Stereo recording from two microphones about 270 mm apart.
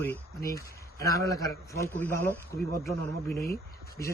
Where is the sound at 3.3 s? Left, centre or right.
Left.